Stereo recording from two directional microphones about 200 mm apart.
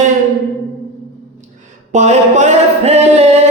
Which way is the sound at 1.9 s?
35° right (ahead or behind).